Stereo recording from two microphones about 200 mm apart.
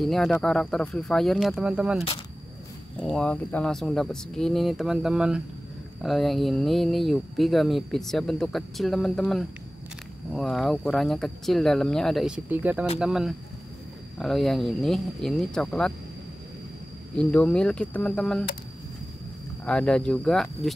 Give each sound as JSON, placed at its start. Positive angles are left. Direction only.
{"t": 0.0, "sound": "speech", "side_deg": 0}
{"t": 17.1, "sound": "speech", "side_deg": 5}
{"t": 19.6, "sound": "speech", "side_deg": 5}